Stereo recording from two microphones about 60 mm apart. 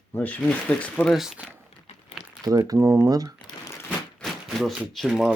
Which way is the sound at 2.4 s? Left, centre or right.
Right.